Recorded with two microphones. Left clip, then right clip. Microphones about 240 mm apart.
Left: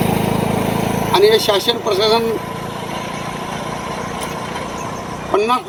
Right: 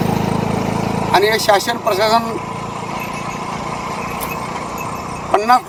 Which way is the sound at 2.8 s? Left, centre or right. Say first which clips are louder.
Right 1 dB; left.